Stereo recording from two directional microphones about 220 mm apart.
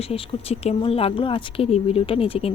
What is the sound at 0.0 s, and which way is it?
Speech, 25° left (ahead or behind).